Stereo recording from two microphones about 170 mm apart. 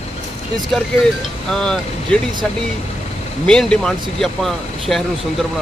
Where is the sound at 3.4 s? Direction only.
5° left (ahead or behind).